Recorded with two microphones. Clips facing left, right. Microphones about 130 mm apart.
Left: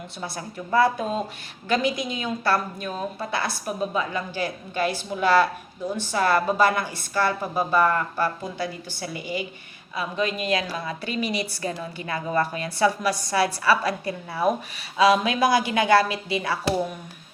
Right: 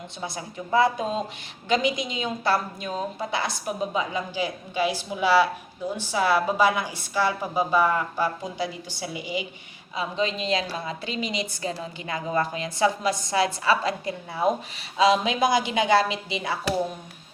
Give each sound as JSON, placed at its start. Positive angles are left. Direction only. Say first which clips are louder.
{"t": 0.2, "sound": "a woman's voice", "louder": "even", "side_deg": -20}